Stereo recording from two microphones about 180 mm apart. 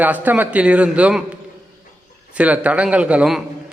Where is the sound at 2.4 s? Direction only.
10° right (ahead or behind).